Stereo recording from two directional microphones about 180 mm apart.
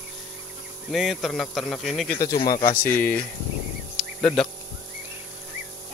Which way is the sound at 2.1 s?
20° left (ahead or behind).